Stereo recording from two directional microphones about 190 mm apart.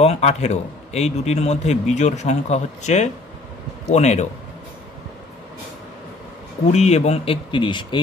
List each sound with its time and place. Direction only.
0.0 s a man's voice: 35° left (ahead or behind)
6.7 s a man's voice: 35° left (ahead or behind)